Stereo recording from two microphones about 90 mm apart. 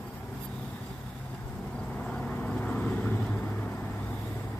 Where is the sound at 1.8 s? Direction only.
10° left (ahead or behind).